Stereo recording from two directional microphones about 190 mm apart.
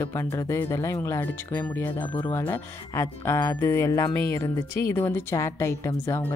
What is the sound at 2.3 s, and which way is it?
A woman's voice, 10° left (ahead or behind).